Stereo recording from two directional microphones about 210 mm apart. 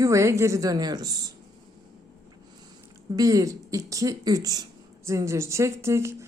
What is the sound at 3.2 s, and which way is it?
Speech, 15° right (ahead or behind).